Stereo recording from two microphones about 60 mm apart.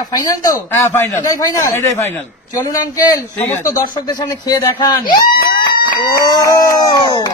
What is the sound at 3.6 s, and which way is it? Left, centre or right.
Speech, left.